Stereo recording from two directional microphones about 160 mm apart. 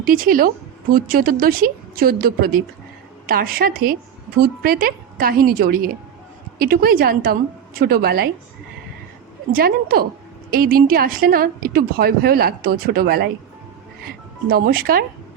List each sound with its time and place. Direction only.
0.0 s a woman's voice: 65° right (ahead or behind)
9.5 s a woman's voice: 65° right (ahead or behind)
14.5 s a woman's voice: 70° right (ahead or behind)